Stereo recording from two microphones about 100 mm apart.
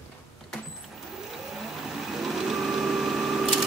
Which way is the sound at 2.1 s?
Centre (ahead or behind).